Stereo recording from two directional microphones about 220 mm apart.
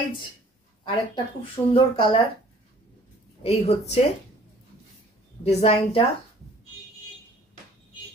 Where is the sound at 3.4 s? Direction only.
30° left (ahead or behind).